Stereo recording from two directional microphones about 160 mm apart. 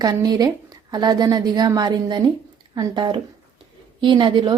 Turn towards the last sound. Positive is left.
turn(degrees=-30)  # may be behind; listen again after turning